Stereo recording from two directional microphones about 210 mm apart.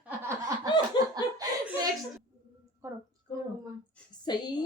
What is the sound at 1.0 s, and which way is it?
Laughter, 20° left (ahead or behind).